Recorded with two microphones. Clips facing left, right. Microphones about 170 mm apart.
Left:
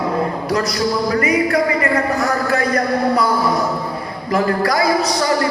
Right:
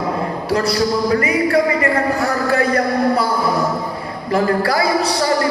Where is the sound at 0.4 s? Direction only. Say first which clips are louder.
Right 1 dB; 30° right (ahead or behind).